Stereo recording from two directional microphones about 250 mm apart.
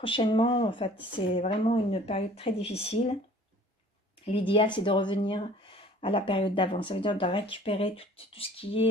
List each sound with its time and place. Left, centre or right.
0.0 s speech: centre
4.2 s speech: left